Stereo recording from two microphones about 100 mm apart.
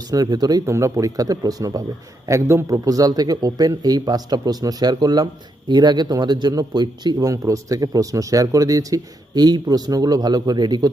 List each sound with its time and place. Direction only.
0.1 s speech: 40° right (ahead or behind)
0.6 s speech: 30° right (ahead or behind)